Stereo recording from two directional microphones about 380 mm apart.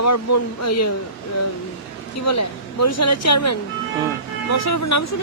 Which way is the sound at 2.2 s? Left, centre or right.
Left.